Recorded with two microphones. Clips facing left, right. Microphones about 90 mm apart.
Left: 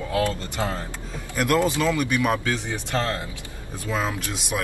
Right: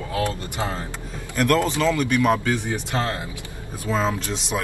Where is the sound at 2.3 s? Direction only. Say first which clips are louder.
Right 3 dB; 15° right (ahead or behind).